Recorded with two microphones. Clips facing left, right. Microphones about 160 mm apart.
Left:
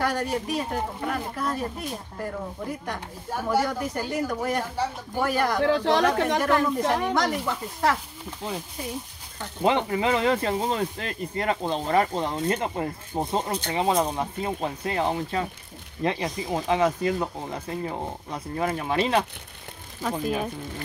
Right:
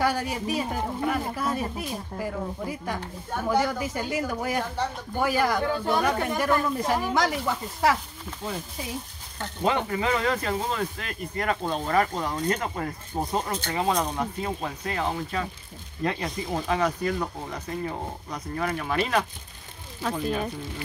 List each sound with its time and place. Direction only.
0.0 s speech: 5° right (ahead or behind)
5.7 s speech: 90° left
7.2 s speech: 5° right (ahead or behind)
9.6 s speech: 20° left (ahead or behind)
20.0 s speech: 5° left (ahead or behind)